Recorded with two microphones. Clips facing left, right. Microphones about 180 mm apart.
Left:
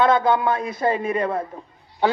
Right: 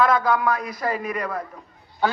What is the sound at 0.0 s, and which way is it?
A man's voice, 25° left (ahead or behind).